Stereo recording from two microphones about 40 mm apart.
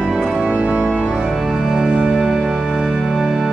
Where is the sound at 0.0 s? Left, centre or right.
Centre.